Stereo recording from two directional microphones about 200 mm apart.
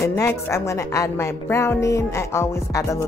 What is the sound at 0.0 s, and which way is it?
Speech, 15° left (ahead or behind).